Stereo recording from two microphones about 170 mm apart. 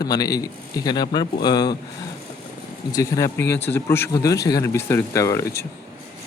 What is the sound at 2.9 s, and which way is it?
Speech, 20° left (ahead or behind).